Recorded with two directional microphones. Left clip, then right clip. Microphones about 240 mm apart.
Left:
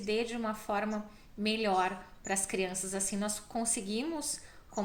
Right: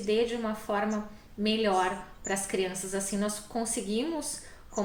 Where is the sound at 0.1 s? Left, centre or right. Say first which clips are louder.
Right 5 dB; left.